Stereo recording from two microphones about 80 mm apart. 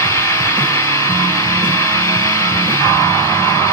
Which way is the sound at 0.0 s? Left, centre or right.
Left.